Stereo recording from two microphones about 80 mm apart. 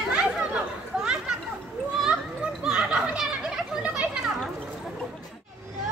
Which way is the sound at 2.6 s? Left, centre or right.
Centre.